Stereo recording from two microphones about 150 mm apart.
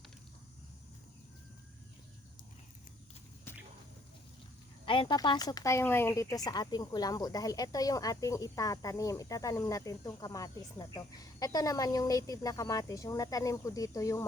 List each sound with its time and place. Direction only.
4.9 s speech: 30° left (ahead or behind)